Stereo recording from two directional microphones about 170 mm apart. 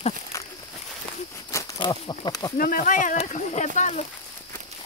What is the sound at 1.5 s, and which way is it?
Speech, 20° left (ahead or behind).